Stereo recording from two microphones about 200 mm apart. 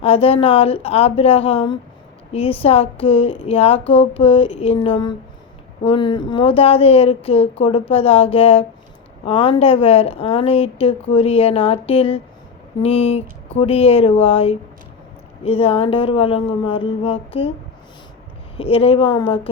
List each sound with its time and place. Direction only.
0.0 s a woman's voice: 30° left (ahead or behind)
18.5 s a woman's voice: 30° left (ahead or behind)